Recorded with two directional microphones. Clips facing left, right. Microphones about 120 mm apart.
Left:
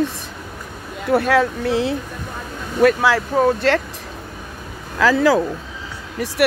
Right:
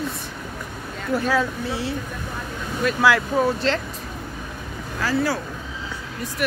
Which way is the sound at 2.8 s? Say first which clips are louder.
Left 10 dB; 75° left (ahead or behind).